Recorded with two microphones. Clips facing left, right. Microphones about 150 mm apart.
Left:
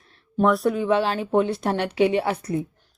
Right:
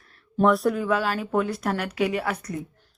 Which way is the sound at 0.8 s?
25° left (ahead or behind).